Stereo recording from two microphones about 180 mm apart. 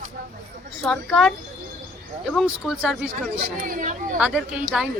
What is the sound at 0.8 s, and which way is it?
Speech, 5° left (ahead or behind).